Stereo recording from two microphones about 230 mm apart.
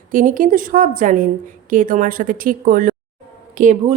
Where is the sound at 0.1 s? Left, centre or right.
Right.